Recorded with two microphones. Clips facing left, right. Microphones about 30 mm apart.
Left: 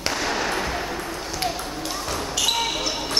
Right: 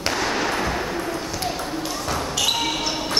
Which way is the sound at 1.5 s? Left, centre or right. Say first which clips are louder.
Right 2 dB; centre.